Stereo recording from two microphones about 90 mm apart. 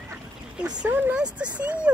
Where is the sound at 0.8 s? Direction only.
20° right (ahead or behind).